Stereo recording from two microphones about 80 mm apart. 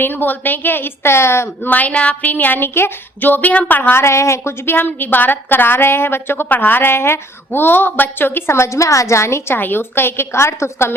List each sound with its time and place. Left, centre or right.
0.0 s a woman's voice: left
1.7 s a woman's voice: centre
4.0 s a woman's voice: left